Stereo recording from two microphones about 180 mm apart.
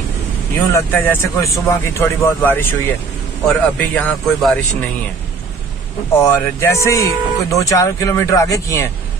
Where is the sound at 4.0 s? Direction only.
5° left (ahead or behind).